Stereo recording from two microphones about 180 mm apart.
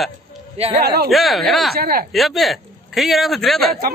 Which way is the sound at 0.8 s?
60° right (ahead or behind).